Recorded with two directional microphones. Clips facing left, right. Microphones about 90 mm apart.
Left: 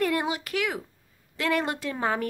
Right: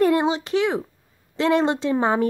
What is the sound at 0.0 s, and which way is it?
A woman's voice, 25° right (ahead or behind).